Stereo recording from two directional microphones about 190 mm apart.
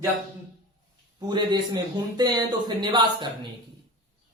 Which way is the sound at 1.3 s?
20° right (ahead or behind).